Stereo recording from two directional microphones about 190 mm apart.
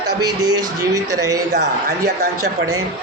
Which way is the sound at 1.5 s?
65° right (ahead or behind).